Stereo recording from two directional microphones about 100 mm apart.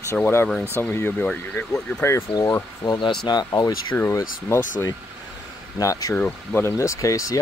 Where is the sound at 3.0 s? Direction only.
50° left (ahead or behind).